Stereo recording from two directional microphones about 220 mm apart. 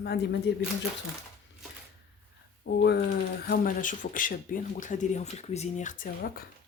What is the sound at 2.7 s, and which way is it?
Speech, 55° left (ahead or behind).